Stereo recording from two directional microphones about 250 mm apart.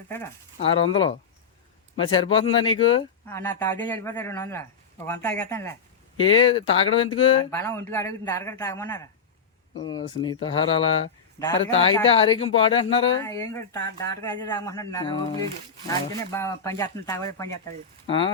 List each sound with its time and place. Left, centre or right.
2.0 s speech: centre
3.2 s speech: centre
6.2 s speech: left
7.5 s speech: centre
11.4 s speech: centre